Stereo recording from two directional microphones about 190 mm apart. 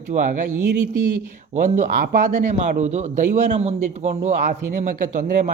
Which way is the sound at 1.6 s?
40° right (ahead or behind).